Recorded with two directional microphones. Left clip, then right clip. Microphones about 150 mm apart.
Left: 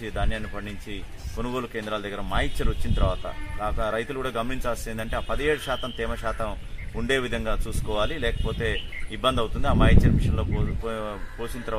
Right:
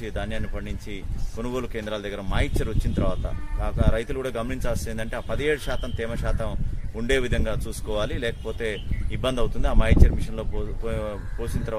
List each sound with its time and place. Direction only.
0.0 s speech: 35° right (ahead or behind)
1.4 s speech: 30° right (ahead or behind)